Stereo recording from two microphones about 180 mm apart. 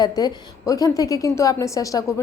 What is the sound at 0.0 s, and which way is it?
A woman's voice, 20° left (ahead or behind).